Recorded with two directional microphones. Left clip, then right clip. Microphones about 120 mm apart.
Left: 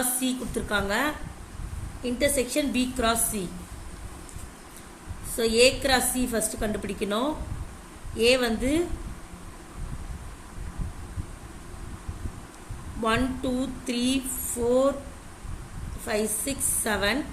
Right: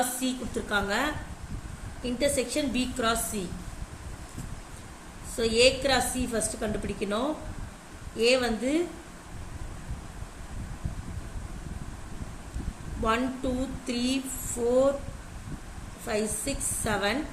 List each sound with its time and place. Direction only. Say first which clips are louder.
0.2 s a woman's voice: left 2 dB; 30° left (ahead or behind)
5.4 s a woman's voice: left 2 dB; 35° left (ahead or behind)
13.0 s a woman's voice: left 2 dB; 35° left (ahead or behind)
16.0 s a woman's voice: left 2 dB; 30° left (ahead or behind)